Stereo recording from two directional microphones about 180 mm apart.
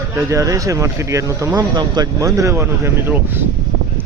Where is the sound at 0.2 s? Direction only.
15° right (ahead or behind).